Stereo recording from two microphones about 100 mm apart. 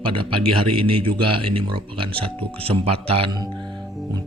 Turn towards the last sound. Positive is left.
turn(degrees=-75)  # may be behind; listen again after turning